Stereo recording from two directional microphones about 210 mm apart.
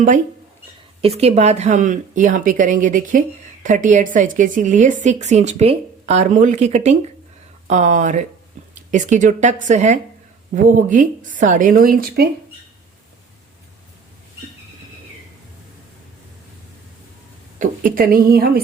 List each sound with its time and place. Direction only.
1.0 s a woman's voice: 30° right (ahead or behind); by 12.3 s 45° right (ahead or behind)
17.6 s a woman's voice: 40° right (ahead or behind)